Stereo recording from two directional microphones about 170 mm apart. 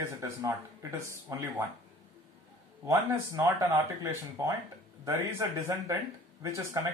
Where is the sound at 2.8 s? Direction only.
20° right (ahead or behind).